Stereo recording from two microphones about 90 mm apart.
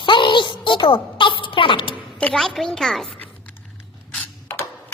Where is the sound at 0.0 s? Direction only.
60° left (ahead or behind).